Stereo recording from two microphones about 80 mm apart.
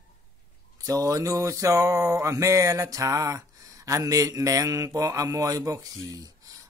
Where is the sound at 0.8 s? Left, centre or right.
Right.